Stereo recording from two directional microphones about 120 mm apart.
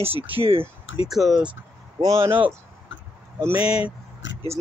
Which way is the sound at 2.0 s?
25° right (ahead or behind).